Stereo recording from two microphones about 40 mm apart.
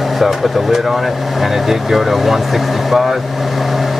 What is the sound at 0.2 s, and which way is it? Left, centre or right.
Speech, centre.